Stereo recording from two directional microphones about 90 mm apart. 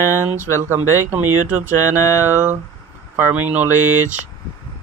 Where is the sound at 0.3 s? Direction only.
20° right (ahead or behind).